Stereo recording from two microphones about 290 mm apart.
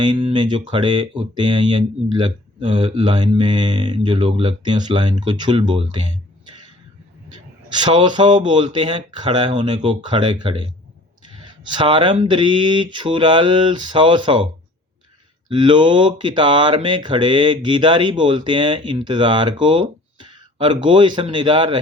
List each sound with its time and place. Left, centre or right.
0.0 s speech: centre
7.8 s speech: centre
11.7 s speech: centre
15.4 s speech: centre